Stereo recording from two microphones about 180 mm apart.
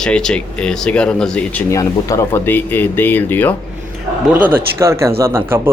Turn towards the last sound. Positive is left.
turn(degrees=-15)  # may be behind; listen again after turning